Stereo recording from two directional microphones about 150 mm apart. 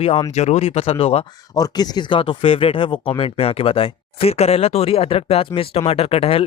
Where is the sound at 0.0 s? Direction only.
40° left (ahead or behind).